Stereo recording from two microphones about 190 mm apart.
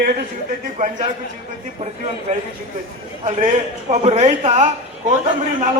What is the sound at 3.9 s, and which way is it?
Speech, 35° right (ahead or behind).